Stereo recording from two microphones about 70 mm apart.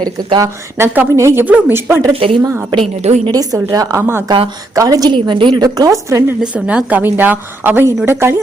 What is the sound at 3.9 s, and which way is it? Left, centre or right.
Speech, right.